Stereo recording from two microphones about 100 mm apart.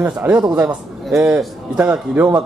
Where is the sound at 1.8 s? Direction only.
15° right (ahead or behind).